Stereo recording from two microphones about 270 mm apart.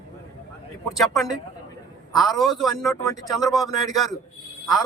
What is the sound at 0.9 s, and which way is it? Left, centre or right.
Speech, centre.